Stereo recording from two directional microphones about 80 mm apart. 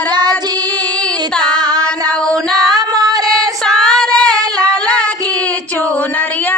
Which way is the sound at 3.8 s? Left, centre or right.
Centre.